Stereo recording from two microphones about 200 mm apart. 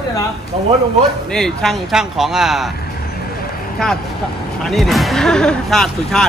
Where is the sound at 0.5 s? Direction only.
30° right (ahead or behind).